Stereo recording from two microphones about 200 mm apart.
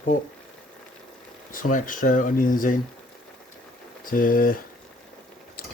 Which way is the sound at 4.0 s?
45° left (ahead or behind).